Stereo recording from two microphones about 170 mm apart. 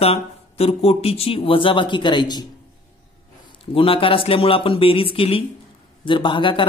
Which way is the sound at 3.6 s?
30° left (ahead or behind).